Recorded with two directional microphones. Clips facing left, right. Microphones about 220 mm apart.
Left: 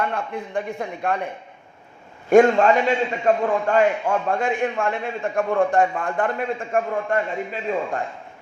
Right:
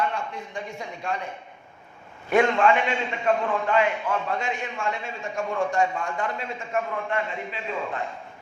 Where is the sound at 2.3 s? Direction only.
45° left (ahead or behind).